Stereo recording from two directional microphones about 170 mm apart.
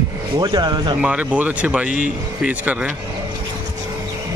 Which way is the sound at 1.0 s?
5° right (ahead or behind).